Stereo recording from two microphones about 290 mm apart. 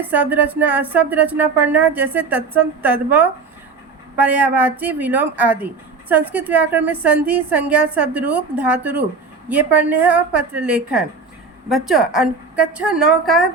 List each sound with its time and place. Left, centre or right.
0.0 s speech: centre